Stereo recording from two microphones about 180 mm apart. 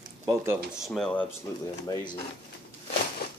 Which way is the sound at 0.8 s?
Centre (ahead or behind).